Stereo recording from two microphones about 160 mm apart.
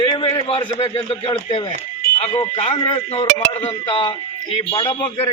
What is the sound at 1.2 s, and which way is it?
Speech, 30° left (ahead or behind).